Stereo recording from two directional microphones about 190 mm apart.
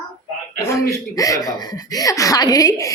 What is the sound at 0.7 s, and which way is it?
Speech, 15° left (ahead or behind).